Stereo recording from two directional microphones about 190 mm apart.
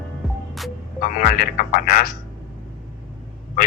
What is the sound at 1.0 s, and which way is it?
Speech, 45° left (ahead or behind).